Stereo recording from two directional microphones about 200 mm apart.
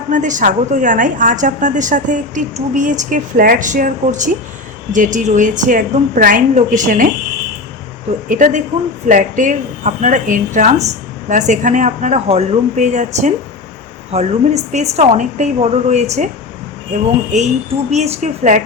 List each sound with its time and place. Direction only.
0.1 s speech: 40° right (ahead or behind)
8.3 s speech: 40° right (ahead or behind)
17.9 s speech: 35° right (ahead or behind)